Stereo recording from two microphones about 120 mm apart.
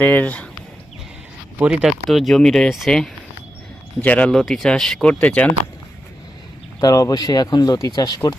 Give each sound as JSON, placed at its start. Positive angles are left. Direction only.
{"t": 0.0, "sound": "speech", "side_deg": 15}
{"t": 1.5, "sound": "speech", "side_deg": -10}
{"t": 6.7, "sound": "speech", "side_deg": 30}